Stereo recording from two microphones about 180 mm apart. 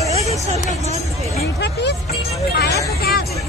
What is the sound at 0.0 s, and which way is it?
Vehicle, 35° right (ahead or behind).